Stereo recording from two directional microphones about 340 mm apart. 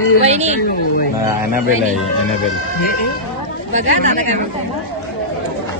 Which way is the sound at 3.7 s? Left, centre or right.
Right.